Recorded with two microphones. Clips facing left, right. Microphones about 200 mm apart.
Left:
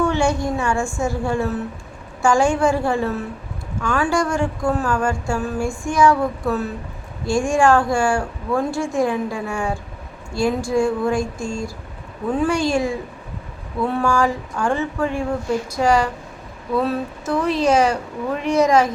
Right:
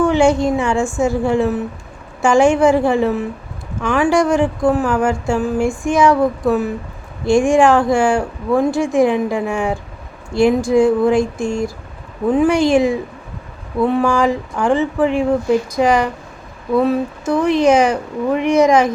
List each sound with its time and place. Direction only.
0.1 s speech: 20° right (ahead or behind)
17.3 s speech: 15° right (ahead or behind)